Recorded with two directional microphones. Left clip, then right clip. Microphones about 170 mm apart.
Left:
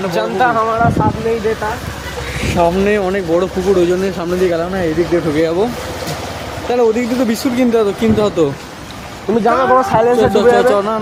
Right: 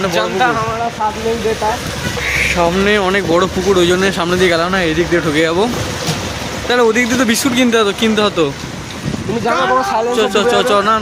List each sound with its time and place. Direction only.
0.1 s speech: 45° left (ahead or behind)
2.6 s speech: 5° left (ahead or behind)
6.7 s speech: centre (ahead or behind)
9.6 s speech: 40° left (ahead or behind)
10.2 s speech: 15° left (ahead or behind)